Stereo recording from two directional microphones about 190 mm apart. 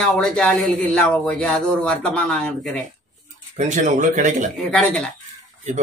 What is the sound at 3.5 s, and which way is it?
Speech, 40° right (ahead or behind).